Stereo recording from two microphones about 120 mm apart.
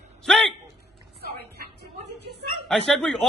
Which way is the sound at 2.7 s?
5° left (ahead or behind).